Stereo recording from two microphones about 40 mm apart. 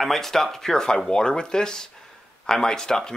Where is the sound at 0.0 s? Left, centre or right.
Centre.